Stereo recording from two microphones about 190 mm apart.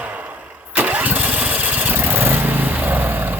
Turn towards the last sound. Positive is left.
turn(degrees=-10)  # may be behind; listen again after turning